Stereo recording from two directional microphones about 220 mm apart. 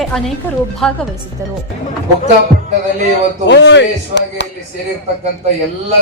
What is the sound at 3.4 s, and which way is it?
A man's voice, 55° left (ahead or behind).